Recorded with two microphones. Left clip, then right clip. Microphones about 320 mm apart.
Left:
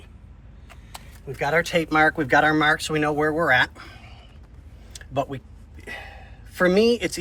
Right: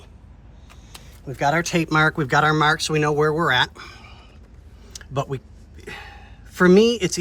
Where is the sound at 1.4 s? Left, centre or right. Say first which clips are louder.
Right 1 dB; centre.